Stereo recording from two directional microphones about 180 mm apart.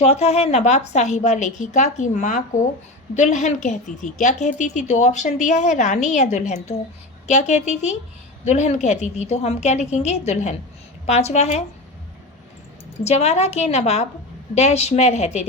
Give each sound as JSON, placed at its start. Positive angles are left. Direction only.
{"t": 0.0, "sound": "a woman's voice", "side_deg": 35}
{"t": 13.1, "sound": "a woman's voice", "side_deg": 35}